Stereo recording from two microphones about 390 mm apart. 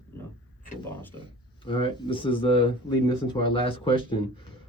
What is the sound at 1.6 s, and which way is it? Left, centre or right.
Speech, centre.